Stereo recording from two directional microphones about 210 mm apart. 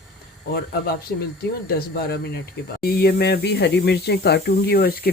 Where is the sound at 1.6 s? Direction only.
50° left (ahead or behind).